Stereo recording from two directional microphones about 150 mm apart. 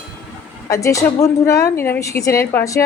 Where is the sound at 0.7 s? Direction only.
20° left (ahead or behind).